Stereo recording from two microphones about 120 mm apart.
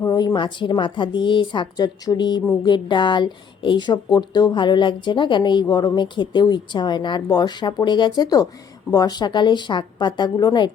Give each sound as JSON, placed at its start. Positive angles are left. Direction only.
{"t": 0.0, "sound": "a woman's voice", "side_deg": 30}